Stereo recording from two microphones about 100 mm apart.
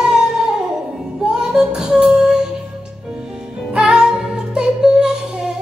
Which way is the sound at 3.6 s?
5° right (ahead or behind).